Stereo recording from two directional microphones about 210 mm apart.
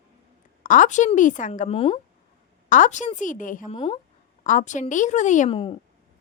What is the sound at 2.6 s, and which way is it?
A woman's voice, 35° left (ahead or behind).